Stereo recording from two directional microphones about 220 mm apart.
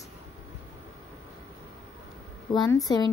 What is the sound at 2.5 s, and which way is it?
Speech, 20° left (ahead or behind).